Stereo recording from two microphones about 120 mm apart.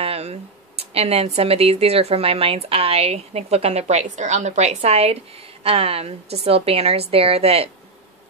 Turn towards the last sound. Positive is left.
turn(degrees=-55)  # may be behind; listen again after turning